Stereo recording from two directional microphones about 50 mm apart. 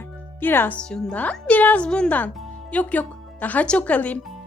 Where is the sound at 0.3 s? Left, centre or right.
Left.